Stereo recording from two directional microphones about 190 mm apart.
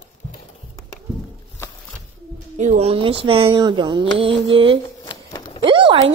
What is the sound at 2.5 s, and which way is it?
Speech, 35° right (ahead or behind).